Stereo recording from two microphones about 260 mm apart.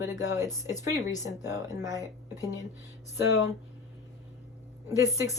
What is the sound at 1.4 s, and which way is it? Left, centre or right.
Speech, centre.